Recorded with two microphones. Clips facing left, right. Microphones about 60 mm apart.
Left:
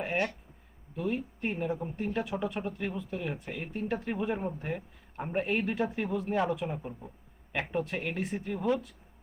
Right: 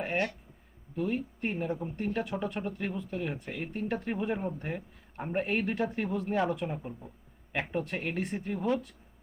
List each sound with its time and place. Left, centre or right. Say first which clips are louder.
0.0 s speech: even; centre